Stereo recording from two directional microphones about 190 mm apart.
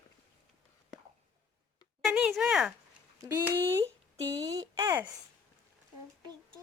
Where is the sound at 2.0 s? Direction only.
5° right (ahead or behind).